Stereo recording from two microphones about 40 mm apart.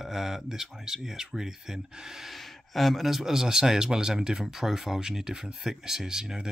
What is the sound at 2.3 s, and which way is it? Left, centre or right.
Speech, centre.